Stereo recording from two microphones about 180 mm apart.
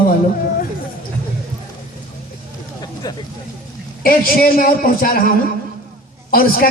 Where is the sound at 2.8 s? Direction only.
20° left (ahead or behind).